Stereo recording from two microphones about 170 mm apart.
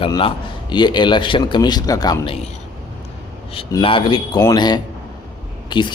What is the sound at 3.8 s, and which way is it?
A man's voice, 30° left (ahead or behind).